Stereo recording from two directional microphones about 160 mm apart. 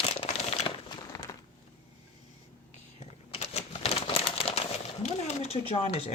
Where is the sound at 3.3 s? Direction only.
40° left (ahead or behind).